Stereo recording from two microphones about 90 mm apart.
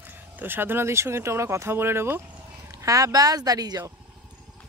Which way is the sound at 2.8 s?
40° right (ahead or behind).